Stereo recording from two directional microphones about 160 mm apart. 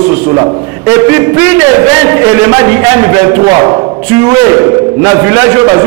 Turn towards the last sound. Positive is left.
turn(degrees=-20)  # may be behind; listen again after turning